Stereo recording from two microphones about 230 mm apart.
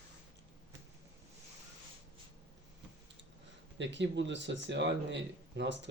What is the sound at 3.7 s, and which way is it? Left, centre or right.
Speech, right.